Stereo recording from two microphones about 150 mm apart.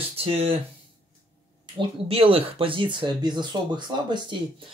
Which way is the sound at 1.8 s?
35° right (ahead or behind).